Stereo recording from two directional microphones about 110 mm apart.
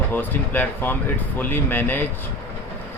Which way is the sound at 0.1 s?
15° left (ahead or behind).